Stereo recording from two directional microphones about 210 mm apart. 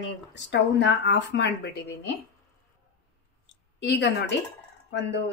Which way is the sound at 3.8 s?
55° left (ahead or behind).